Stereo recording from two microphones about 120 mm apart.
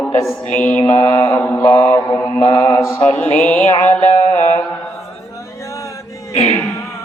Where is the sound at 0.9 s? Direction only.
45° left (ahead or behind).